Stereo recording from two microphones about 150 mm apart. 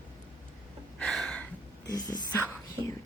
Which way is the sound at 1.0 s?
Centre (ahead or behind).